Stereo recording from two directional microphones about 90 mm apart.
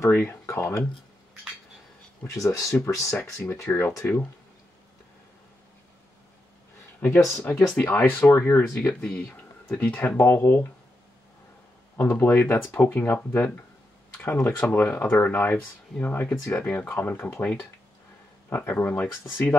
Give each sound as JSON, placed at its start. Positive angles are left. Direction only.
{"t": 0.1, "sound": "speech", "side_deg": 20}
{"t": 2.2, "sound": "speech", "side_deg": 40}
{"t": 7.4, "sound": "speech", "side_deg": 15}
{"t": 8.6, "sound": "speech", "side_deg": 15}
{"t": 12.0, "sound": "speech", "side_deg": 25}
{"t": 14.1, "sound": "a sound", "side_deg": 25}
{"t": 14.8, "sound": "speech", "side_deg": 25}